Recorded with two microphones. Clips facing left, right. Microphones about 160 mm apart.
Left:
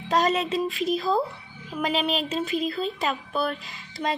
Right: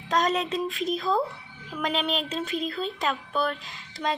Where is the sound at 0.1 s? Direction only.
5° left (ahead or behind).